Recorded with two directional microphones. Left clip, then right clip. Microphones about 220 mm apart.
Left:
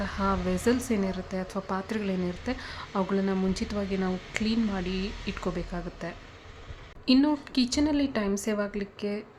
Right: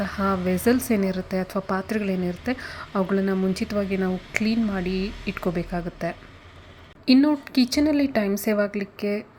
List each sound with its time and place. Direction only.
0.0 s speech: 15° right (ahead or behind)
4.9 s speech: 45° right (ahead or behind)
5.4 s speech: 15° right (ahead or behind)
7.2 s speech: 15° right (ahead or behind)